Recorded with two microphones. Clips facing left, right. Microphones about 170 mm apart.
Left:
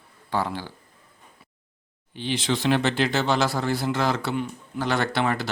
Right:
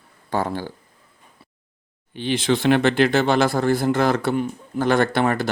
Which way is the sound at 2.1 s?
55° right (ahead or behind).